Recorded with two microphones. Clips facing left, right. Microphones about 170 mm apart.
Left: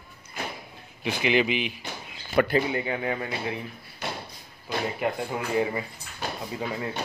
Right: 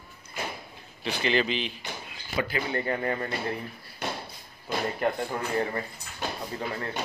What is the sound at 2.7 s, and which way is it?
Speech, 5° left (ahead or behind).